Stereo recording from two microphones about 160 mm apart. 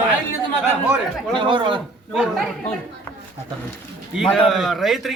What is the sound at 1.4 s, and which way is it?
Speech, 30° right (ahead or behind).